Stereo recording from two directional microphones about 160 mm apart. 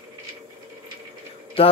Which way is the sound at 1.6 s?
35° left (ahead or behind).